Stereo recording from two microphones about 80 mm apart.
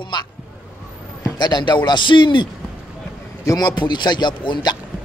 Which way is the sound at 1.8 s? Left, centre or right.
Left.